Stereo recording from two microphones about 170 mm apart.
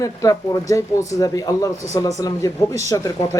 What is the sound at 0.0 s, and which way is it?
Speech, 20° left (ahead or behind).